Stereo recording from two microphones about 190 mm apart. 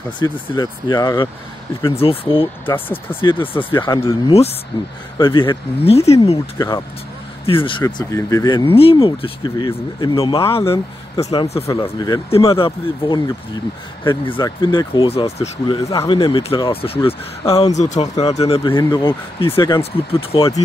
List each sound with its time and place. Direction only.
0.2 s speech: 20° left (ahead or behind)
3.1 s speech: 10° left (ahead or behind)
3.8 s speech: 20° left (ahead or behind)
4.3 s speech: 30° left (ahead or behind)
7.4 s speech: 25° left (ahead or behind)
7.8 s speech: 15° left (ahead or behind); by 11.6 s 35° left (ahead or behind)
11.6 s speech: 20° left (ahead or behind); by 15.6 s 35° left (ahead or behind)
15.6 s speech: 20° left (ahead or behind)
16.2 s speech: 30° left (ahead or behind)
19.8 s speech: 30° left (ahead or behind)